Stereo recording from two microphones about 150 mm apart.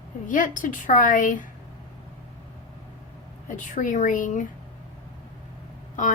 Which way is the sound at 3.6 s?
60° left (ahead or behind).